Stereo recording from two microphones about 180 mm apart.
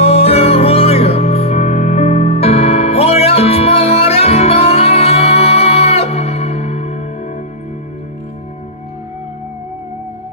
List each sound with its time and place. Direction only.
0.0 s music: 35° left (ahead or behind)